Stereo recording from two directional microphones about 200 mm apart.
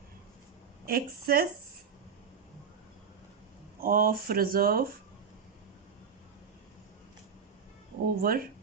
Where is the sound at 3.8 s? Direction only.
45° right (ahead or behind).